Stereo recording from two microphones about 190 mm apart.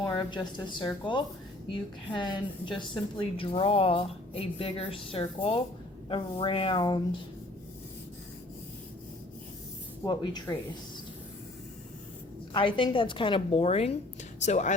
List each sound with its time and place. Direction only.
0.0 s a woman's voice: 20° left (ahead or behind)
10.0 s a woman's voice: 20° left (ahead or behind)
12.5 s a woman's voice: 25° left (ahead or behind)